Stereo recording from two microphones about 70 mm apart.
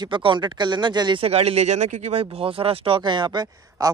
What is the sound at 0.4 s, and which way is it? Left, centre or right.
Speech, right.